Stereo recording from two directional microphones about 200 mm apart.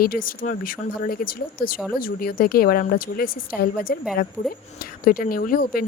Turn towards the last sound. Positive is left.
turn(degrees=50)  # may be behind; listen again after turning